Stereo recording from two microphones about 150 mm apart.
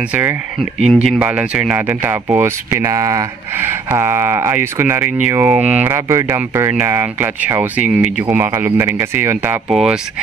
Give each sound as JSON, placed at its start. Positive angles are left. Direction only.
{"t": 0.1, "sound": "speech", "side_deg": -15}
{"t": 0.8, "sound": "speech", "side_deg": -5}
{"t": 9.7, "sound": "speech", "side_deg": -5}